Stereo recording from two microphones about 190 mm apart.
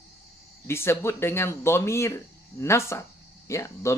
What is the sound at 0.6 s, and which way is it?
Speech, 15° left (ahead or behind).